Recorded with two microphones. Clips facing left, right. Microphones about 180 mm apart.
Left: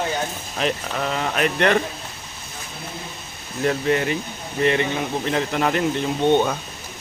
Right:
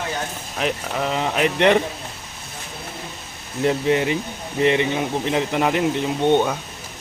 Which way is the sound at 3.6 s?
20° right (ahead or behind).